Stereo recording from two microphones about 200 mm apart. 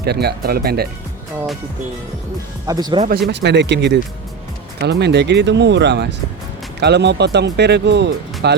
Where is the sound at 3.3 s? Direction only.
60° right (ahead or behind).